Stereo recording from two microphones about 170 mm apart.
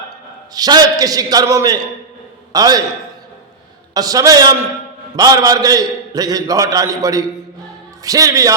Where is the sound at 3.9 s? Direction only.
20° right (ahead or behind).